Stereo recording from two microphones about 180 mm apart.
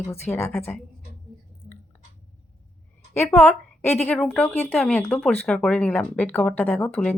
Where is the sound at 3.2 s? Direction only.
10° left (ahead or behind).